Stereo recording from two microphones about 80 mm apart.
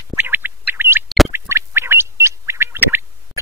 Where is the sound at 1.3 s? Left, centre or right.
Right.